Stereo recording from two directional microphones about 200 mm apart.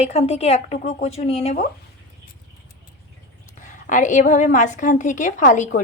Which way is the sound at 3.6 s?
40° left (ahead or behind).